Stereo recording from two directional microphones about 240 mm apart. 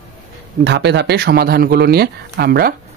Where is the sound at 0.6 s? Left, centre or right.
Right.